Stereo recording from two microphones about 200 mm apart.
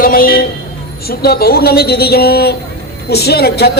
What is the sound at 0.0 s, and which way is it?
A man's voice, 45° left (ahead or behind).